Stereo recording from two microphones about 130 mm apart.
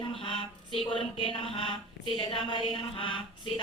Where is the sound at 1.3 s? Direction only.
40° left (ahead or behind).